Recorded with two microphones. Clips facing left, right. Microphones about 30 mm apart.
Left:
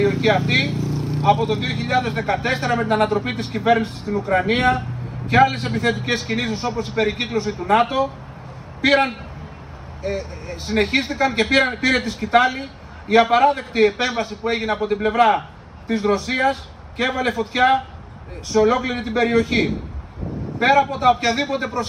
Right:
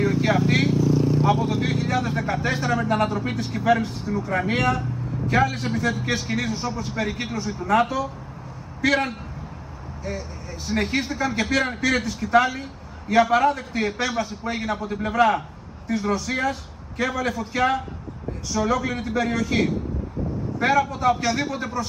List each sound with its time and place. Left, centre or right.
0.0 s speech: left